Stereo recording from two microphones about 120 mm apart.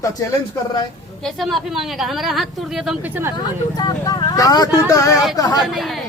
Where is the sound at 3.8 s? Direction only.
35° left (ahead or behind).